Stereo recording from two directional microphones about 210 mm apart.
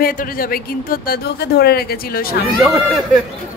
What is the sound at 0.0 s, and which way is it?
Speech, 45° left (ahead or behind).